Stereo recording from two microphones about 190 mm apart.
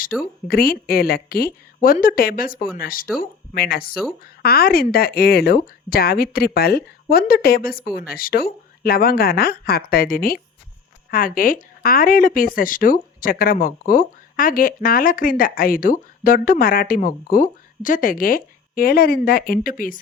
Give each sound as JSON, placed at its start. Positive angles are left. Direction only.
{"t": 0.1, "sound": "speech", "side_deg": 0}
{"t": 0.4, "sound": "speech", "side_deg": 50}